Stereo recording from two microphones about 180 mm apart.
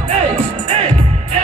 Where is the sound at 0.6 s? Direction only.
35° right (ahead or behind).